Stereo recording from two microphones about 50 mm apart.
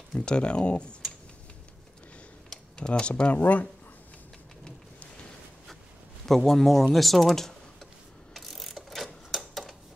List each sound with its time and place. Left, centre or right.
0.2 s speech: centre
2.5 s speech: centre
6.2 s speech: centre
8.3 s a sound: centre